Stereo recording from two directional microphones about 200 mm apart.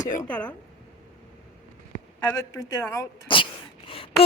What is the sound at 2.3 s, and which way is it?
A woman's voice, 15° left (ahead or behind).